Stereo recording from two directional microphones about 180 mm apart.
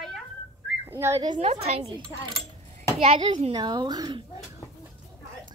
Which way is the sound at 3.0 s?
30° right (ahead or behind).